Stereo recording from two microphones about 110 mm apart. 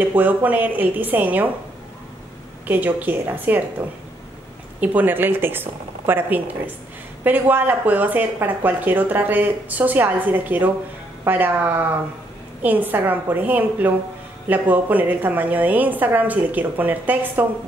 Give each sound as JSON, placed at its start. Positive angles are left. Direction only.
{"t": 0.0, "sound": "speech", "side_deg": -15}
{"t": 2.6, "sound": "speech", "side_deg": -15}
{"t": 4.7, "sound": "a woman's voice", "side_deg": -15}